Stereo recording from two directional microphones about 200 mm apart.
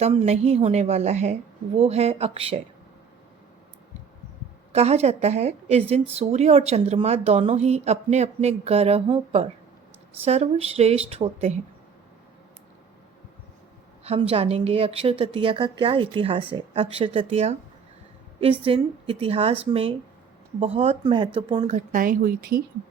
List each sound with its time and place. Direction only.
0.0 s a woman's voice: 30° right (ahead or behind)
4.7 s a woman's voice: 30° right (ahead or behind)
14.0 s a woman's voice: 30° right (ahead or behind)
21.7 s speech: 40° right (ahead or behind)